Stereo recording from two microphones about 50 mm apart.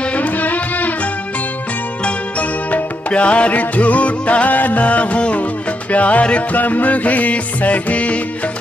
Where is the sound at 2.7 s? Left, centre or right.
Left.